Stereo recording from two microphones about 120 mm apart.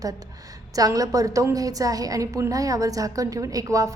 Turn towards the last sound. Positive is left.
turn(degrees=-25)  # may be behind; listen again after turning